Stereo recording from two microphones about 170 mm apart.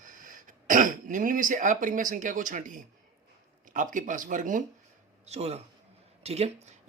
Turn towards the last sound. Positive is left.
turn(degrees=-35)  # may be behind; listen again after turning